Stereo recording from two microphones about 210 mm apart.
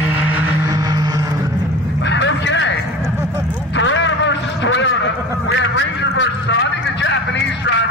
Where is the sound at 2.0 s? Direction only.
60° left (ahead or behind).